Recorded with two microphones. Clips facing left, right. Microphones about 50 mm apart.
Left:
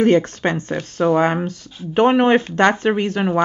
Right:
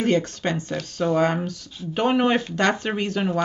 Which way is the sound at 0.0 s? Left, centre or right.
Left.